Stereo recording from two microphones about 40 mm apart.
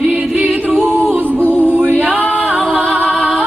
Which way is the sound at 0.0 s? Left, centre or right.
Right.